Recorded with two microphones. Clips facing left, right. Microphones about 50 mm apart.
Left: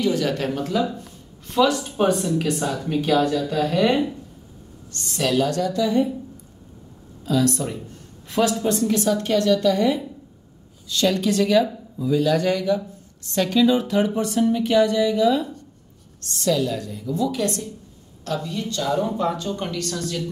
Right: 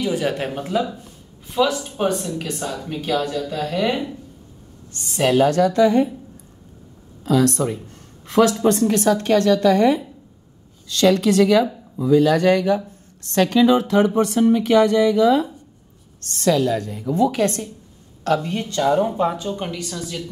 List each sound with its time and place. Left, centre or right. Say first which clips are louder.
0.0 s speech: even; right
1.5 s speech: left 1 dB; centre
4.9 s speech: right 4 dB; centre
5.6 s speech: right 5 dB; right
7.2 s a woman's voice: right 3 dB; right
10.9 s speech: right 5 dB; right
12.2 s speech: right 4 dB; right
14.2 s speech: right 4 dB; right
16.3 s a woman's voice: right 4 dB; right
19.2 s a woman's voice: right 2 dB; centre